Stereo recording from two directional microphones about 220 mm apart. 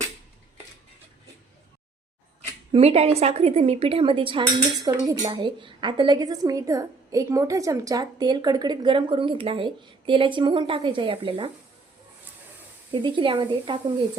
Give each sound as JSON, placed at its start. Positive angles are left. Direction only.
{"t": 2.7, "sound": "a woman's voice", "side_deg": -25}
{"t": 12.9, "sound": "a woman's voice", "side_deg": -20}